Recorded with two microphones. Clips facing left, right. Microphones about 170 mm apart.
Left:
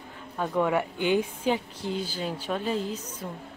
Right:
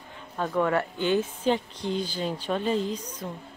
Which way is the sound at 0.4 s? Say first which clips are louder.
Even; 10° left (ahead or behind).